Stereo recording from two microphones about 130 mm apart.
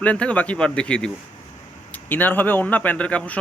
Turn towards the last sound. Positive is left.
turn(degrees=10)  # may be behind; listen again after turning